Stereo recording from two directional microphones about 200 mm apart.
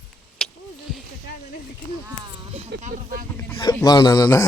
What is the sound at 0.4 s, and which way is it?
Vehicle, centre (ahead or behind).